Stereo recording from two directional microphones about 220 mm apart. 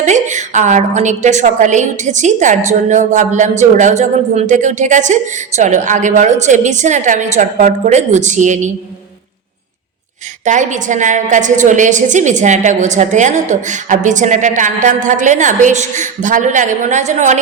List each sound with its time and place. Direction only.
0.0 s a woman's voice: 35° right (ahead or behind)
10.4 s a woman's voice: 35° right (ahead or behind)